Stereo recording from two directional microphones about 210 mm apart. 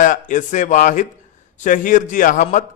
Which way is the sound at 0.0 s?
35° left (ahead or behind).